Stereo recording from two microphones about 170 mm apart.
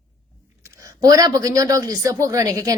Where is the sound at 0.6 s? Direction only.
20° right (ahead or behind).